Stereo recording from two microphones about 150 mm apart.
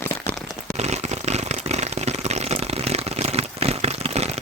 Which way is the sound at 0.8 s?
45° right (ahead or behind).